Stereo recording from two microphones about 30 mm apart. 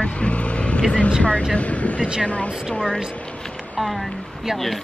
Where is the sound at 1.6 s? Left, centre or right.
Left.